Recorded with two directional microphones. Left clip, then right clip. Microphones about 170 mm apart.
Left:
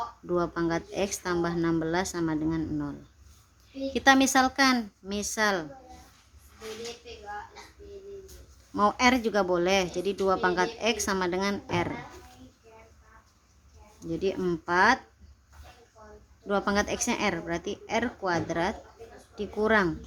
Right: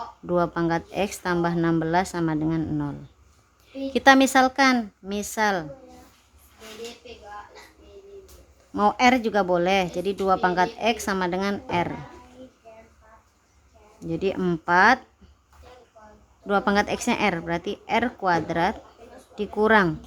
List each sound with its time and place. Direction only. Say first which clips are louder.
0.3 s a woman's voice: right 5 dB; 25° right (ahead or behind)
8.7 s a woman's voice: right 4 dB; 25° right (ahead or behind)
14.0 s a woman's voice: right 3 dB; 30° right (ahead or behind)
16.5 s a woman's voice: right 5 dB; 30° right (ahead or behind)